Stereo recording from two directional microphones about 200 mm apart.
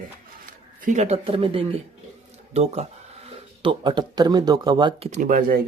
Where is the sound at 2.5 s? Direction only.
30° right (ahead or behind).